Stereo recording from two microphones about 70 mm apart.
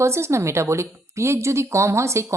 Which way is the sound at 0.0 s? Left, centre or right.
Right.